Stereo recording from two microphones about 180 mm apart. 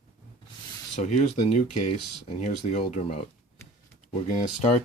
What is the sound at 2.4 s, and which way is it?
Speech, 40° left (ahead or behind).